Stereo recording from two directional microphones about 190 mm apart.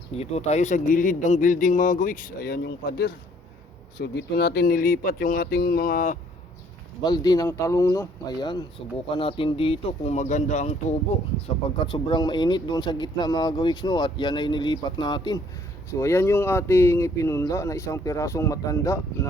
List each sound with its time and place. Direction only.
0.2 s speech: 35° left (ahead or behind)
7.0 s speech: 20° left (ahead or behind); by 10.7 s 40° left (ahead or behind)
11.9 s speech: 25° left (ahead or behind)